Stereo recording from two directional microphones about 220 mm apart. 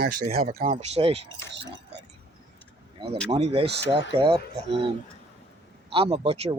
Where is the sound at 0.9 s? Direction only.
25° right (ahead or behind).